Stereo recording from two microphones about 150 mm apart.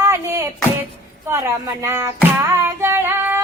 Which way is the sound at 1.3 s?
20° right (ahead or behind).